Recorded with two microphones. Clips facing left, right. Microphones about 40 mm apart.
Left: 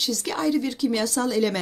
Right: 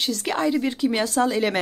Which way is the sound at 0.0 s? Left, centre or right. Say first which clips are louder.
Right 2 dB; right.